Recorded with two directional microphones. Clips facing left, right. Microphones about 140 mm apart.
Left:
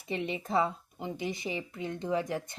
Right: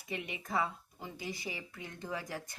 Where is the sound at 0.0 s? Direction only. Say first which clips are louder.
Left 7 dB; 25° left (ahead or behind).